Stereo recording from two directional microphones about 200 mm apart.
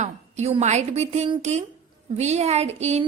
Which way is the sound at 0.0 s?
35° right (ahead or behind).